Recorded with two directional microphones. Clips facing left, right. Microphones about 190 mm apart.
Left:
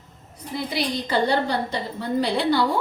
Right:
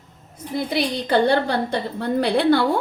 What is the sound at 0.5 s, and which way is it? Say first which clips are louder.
A woman's voice: right 3 dB; 60° right (ahead or behind).